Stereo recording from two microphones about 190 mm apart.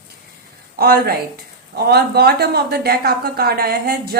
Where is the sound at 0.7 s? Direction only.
55° right (ahead or behind).